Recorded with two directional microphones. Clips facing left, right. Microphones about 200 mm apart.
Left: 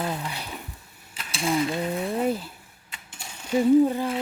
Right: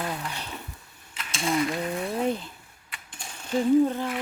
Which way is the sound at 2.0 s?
5° left (ahead or behind).